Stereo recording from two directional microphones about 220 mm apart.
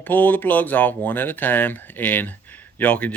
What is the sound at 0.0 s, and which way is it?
Speech, 5° left (ahead or behind).